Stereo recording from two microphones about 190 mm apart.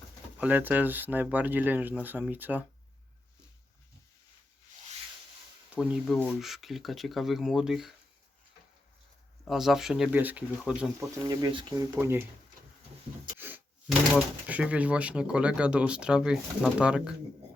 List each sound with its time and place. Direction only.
0.3 s speech: 10° right (ahead or behind)
5.8 s speech: 5° right (ahead or behind)
9.4 s speech: centre (ahead or behind)
11.0 s speech: 20° right (ahead or behind)
11.9 s speech: 10° right (ahead or behind)
13.4 s gasp: 10° right (ahead or behind)
14.4 s speech: 10° right (ahead or behind)